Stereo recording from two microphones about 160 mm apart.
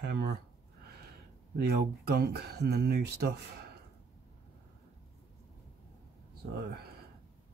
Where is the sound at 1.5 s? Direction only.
90° right.